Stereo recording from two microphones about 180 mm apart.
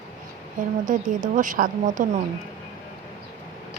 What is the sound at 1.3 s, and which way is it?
Speech, 45° right (ahead or behind).